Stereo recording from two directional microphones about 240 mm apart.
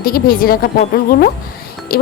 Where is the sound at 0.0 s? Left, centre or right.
Left.